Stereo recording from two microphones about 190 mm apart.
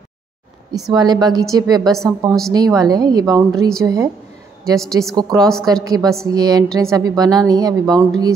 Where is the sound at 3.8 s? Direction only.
20° right (ahead or behind).